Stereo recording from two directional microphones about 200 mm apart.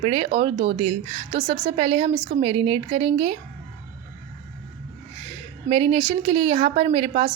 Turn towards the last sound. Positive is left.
turn(degrees=-25)  # may be behind; listen again after turning